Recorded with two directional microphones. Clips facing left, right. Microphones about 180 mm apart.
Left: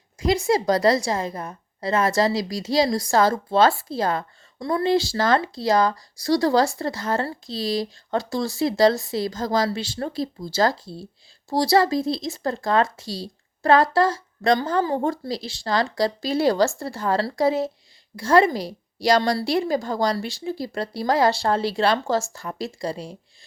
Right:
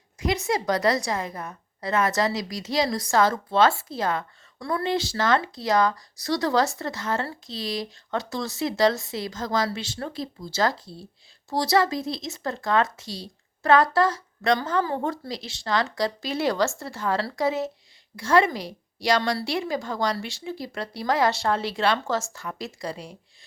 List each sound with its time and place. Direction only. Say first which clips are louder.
0.2 s speech: left 5 dB; 30° left (ahead or behind)
4.6 s speech: left 4 dB; 20° left (ahead or behind)
4.9 s speech: left 3 dB; 35° left (ahead or behind)